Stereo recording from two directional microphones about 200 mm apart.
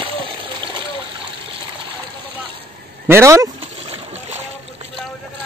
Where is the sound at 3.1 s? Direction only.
15° right (ahead or behind).